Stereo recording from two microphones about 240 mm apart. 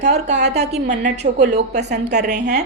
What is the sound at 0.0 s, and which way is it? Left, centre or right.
A woman's voice, right.